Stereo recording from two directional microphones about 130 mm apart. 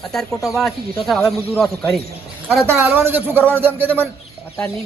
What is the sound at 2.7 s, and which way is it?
Speech, 15° right (ahead or behind).